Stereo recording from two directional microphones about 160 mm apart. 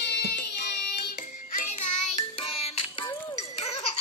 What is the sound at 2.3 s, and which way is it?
Music, 40° left (ahead or behind).